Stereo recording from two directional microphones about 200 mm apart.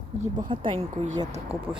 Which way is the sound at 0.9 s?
40° right (ahead or behind).